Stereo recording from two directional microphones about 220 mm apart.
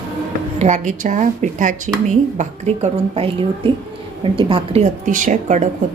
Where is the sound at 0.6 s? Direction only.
35° right (ahead or behind).